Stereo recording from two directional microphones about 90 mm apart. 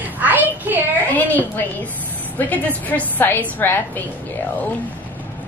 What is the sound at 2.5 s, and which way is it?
A woman's voice, 15° left (ahead or behind).